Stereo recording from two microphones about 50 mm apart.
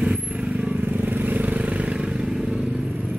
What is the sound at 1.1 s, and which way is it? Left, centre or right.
Vehicle, right.